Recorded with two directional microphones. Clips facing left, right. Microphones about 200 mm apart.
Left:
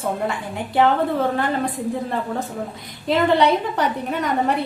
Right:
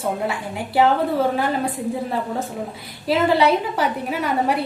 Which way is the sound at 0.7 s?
10° right (ahead or behind).